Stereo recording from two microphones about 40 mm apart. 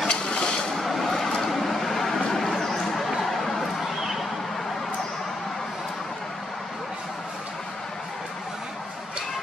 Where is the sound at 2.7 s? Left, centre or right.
Centre.